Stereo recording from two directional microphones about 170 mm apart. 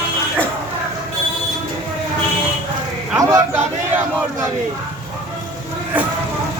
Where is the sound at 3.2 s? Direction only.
20° right (ahead or behind).